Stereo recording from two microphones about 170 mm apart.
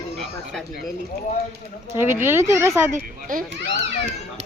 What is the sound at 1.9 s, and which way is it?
Speech, 15° right (ahead or behind).